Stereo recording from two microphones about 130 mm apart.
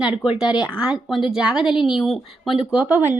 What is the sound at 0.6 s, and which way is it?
A woman's voice, 5° right (ahead or behind).